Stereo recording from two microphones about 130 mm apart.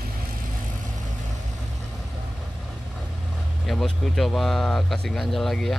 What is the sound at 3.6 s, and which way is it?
Speech, 5° left (ahead or behind).